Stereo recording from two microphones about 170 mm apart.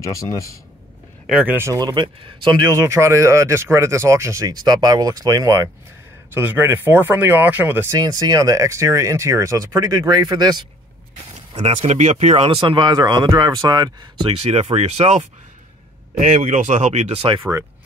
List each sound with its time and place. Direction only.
0.0 s a man's voice: 20° left (ahead or behind)
1.2 s speech: 5° right (ahead or behind); by 10.7 s 25° right (ahead or behind)
11.6 s speech: 35° right (ahead or behind)
14.3 s speech: 35° right (ahead or behind)